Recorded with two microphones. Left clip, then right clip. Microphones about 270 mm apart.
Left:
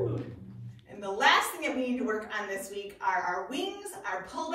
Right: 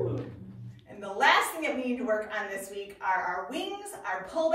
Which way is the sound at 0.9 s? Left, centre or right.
Centre.